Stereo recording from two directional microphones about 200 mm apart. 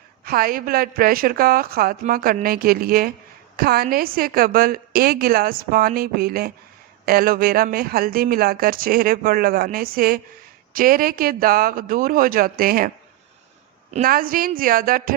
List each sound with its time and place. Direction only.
0.3 s speech: 45° right (ahead or behind)
13.9 s speech: 45° right (ahead or behind)